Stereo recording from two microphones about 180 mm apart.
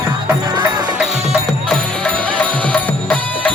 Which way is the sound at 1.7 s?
5° left (ahead or behind).